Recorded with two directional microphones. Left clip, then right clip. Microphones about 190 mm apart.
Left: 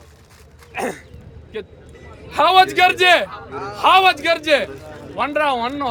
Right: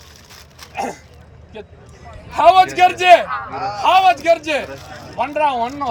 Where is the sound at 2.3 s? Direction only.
10° left (ahead or behind).